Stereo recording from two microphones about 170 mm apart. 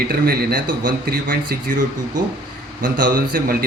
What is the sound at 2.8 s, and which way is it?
Speech, 55° right (ahead or behind).